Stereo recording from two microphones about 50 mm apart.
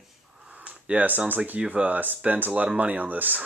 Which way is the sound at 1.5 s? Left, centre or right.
Right.